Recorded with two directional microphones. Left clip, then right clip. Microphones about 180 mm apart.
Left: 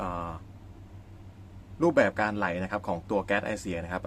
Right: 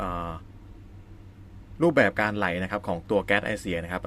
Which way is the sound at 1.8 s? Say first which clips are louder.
Right 2 dB; 15° right (ahead or behind).